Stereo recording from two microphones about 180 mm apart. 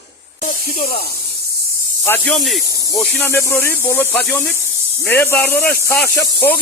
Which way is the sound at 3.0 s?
10° left (ahead or behind).